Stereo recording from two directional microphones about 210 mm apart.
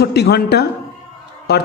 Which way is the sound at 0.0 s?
50° left (ahead or behind).